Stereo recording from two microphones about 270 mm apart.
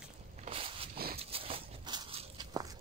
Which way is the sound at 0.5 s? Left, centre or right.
Centre.